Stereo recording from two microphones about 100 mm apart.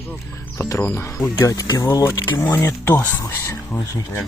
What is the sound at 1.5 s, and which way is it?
Speech, 40° left (ahead or behind).